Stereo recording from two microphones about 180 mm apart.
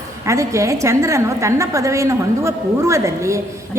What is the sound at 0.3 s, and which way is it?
A woman's voice, 15° right (ahead or behind).